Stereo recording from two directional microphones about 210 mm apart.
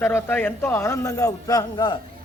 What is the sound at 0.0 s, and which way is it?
A man's voice, 10° left (ahead or behind).